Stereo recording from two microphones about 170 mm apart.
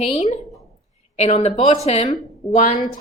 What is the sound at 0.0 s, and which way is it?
A woman's voice, 35° left (ahead or behind).